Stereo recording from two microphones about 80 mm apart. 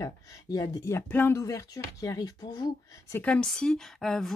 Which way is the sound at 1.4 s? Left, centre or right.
Left.